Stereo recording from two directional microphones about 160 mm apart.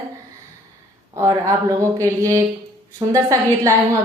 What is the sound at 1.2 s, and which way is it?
A woman's voice, 20° right (ahead or behind).